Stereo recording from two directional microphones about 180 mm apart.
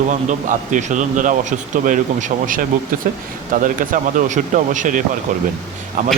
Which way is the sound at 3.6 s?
50° right (ahead or behind).